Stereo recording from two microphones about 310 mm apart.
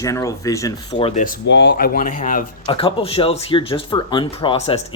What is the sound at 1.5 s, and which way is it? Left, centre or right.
Speech, left.